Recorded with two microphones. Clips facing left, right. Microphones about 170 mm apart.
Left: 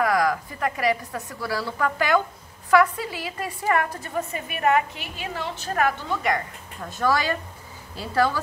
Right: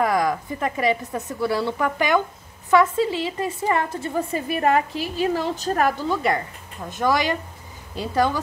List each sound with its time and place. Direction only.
0.0 s a woman's voice: 25° right (ahead or behind)
6.8 s a woman's voice: 15° right (ahead or behind)